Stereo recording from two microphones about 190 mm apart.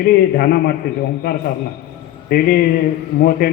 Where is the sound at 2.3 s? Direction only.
50° left (ahead or behind).